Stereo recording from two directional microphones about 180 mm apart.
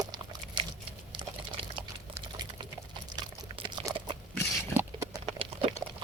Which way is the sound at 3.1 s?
25° right (ahead or behind).